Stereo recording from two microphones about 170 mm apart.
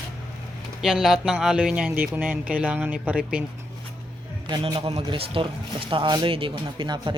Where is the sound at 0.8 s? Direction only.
Centre (ahead or behind).